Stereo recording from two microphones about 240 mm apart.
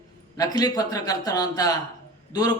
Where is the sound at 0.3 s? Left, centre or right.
Centre.